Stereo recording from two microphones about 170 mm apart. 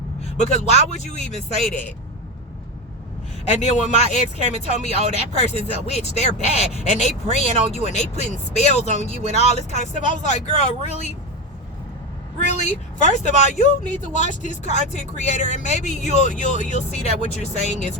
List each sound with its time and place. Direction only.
0.3 s speech: 40° left (ahead or behind)
3.6 s speech: 45° left (ahead or behind)
12.4 s speech: 45° left (ahead or behind)